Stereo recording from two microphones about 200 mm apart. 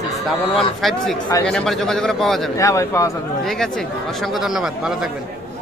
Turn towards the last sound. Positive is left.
turn(degrees=0)  # may be behind; listen again after turning